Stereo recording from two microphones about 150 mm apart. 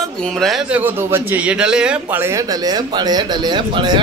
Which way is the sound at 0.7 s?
15° right (ahead or behind).